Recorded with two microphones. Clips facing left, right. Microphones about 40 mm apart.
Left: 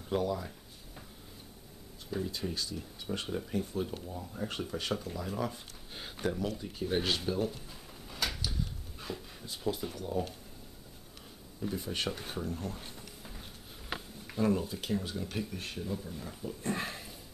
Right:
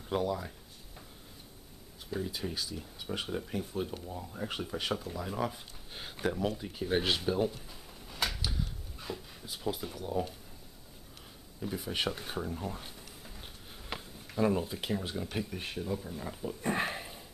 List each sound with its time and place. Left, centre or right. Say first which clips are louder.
0.1 s speech: even; centre
2.0 s speech: even; centre
8.2 s a sound: right 1 dB; centre
11.6 s speech: right 1 dB; centre
14.4 s speech: right 1 dB; centre